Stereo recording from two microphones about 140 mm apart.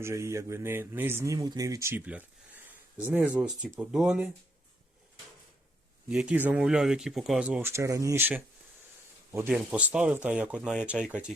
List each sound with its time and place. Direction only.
0.0 s speech: 20° right (ahead or behind); by 4.3 s 5° right (ahead or behind)
6.1 s speech: 5° right (ahead or behind)
7.7 s speech: 20° right (ahead or behind); by 11.3 s 5° right (ahead or behind)